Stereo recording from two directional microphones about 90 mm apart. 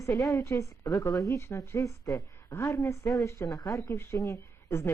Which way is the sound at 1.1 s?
Centre (ahead or behind).